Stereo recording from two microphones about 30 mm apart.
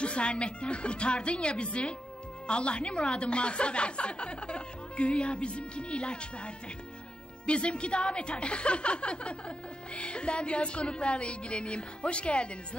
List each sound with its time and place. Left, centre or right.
0.0 s a woman's voice: left